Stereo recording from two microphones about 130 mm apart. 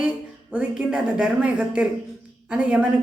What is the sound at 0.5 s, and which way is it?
Speech, 5° right (ahead or behind).